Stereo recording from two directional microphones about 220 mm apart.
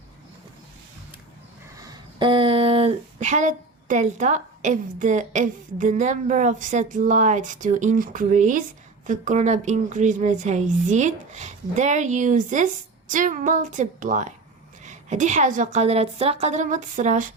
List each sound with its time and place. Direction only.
1.7 s speech: 15° right (ahead or behind); by 17.3 s 35° right (ahead or behind)